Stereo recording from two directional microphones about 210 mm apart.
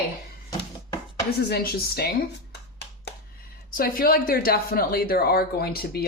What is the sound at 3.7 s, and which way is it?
Speech, 45° left (ahead or behind).